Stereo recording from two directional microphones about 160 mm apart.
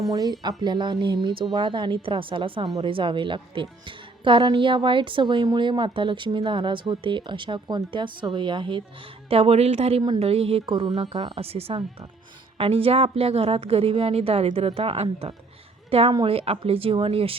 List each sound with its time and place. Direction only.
0.1 s a woman's voice: 25° right (ahead or behind)
10.9 s a woman's voice: 45° right (ahead or behind)